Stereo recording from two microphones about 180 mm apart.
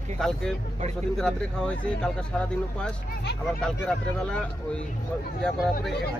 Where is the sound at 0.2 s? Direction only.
5° left (ahead or behind).